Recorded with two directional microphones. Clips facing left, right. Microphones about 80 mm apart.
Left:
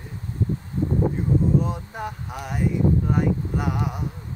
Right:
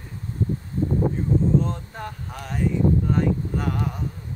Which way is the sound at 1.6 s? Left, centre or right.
Centre.